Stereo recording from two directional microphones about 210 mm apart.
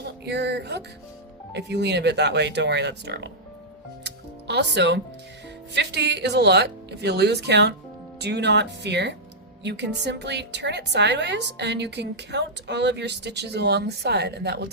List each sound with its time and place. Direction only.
0.0 s music: 50° right (ahead or behind)
1.5 s speech: 55° right (ahead or behind)
4.0 s music: 55° right (ahead or behind)
5.7 s a woman's voice: 55° right (ahead or behind)